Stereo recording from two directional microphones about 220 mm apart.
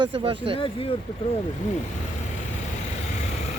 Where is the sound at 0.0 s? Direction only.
25° right (ahead or behind).